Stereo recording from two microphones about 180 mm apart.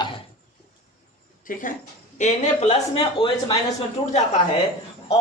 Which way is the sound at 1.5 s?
45° left (ahead or behind).